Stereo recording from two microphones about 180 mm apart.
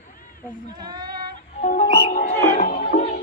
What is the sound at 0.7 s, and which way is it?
Child singing, 25° right (ahead or behind).